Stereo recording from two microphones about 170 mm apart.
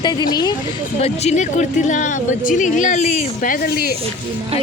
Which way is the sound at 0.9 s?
40° left (ahead or behind).